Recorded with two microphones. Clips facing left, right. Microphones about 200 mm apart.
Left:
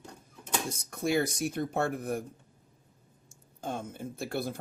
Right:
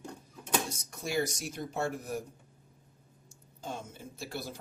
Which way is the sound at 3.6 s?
55° left (ahead or behind).